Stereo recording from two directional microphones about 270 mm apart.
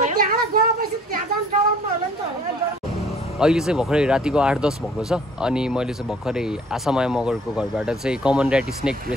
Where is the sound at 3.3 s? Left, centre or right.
Centre.